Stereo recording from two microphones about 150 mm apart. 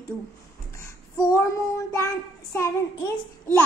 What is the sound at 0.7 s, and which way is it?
Child singing, 20° left (ahead or behind).